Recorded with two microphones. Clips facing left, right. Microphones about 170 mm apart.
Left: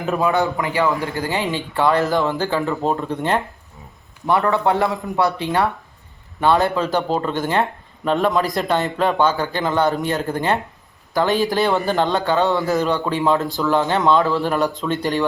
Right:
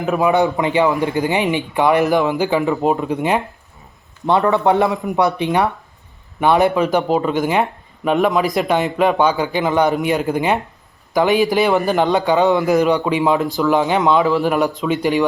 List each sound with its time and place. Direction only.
0.2 s a man's voice: 20° right (ahead or behind)